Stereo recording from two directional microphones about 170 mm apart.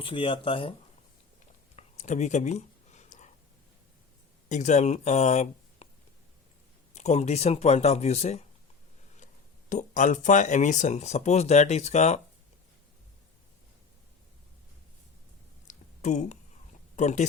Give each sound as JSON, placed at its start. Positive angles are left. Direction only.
{"t": 0.0, "sound": "speech", "side_deg": 30}
{"t": 1.7, "sound": "a sound", "side_deg": 45}
{"t": 4.4, "sound": "speech", "side_deg": 45}
{"t": 6.9, "sound": "speech", "side_deg": 40}
{"t": 15.6, "sound": "a sound", "side_deg": 45}
{"t": 16.9, "sound": "speech", "side_deg": 45}